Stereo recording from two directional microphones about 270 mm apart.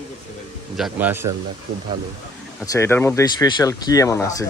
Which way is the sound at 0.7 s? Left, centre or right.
Centre.